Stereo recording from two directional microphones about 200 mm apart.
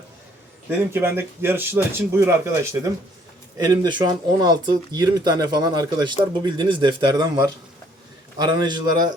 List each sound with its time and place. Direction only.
0.9 s speech: 10° right (ahead or behind)